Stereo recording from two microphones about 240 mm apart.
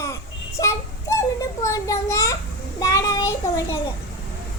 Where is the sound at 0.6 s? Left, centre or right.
Centre.